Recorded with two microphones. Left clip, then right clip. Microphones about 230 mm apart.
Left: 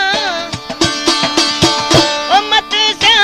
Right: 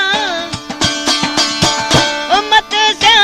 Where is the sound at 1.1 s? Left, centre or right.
Left.